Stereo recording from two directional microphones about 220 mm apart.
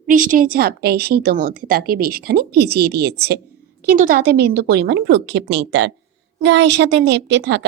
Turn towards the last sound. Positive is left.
turn(degrees=-50)  # may be behind; listen again after turning